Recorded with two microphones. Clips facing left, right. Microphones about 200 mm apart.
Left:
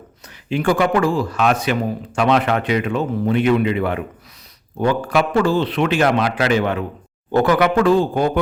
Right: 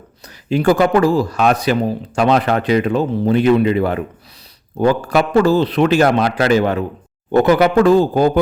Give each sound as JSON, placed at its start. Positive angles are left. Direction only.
{"t": 0.5, "sound": "speech", "side_deg": -40}
{"t": 7.3, "sound": "speech", "side_deg": -20}
{"t": 7.6, "sound": "speech", "side_deg": -40}